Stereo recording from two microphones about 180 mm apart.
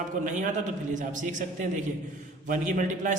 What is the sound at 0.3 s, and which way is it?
Speech, 45° right (ahead or behind).